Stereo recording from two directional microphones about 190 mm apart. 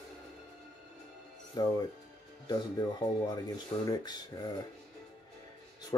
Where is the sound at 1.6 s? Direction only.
20° left (ahead or behind).